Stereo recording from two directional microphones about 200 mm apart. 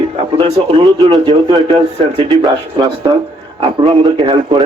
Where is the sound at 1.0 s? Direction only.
25° right (ahead or behind).